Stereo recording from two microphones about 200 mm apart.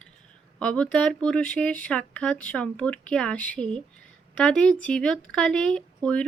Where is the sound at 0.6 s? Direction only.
5° left (ahead or behind).